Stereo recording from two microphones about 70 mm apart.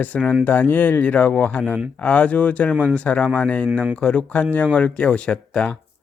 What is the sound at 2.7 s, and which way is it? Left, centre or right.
Speech, right.